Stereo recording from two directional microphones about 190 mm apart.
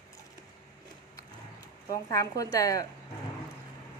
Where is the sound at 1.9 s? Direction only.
20° left (ahead or behind).